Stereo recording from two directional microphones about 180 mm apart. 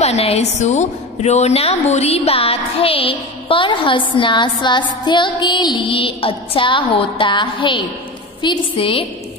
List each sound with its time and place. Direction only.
0.0 s music: 35° left (ahead or behind)